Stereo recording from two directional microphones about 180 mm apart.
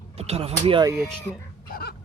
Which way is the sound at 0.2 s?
35° right (ahead or behind).